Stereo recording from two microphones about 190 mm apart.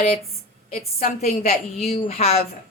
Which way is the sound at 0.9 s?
40° left (ahead or behind).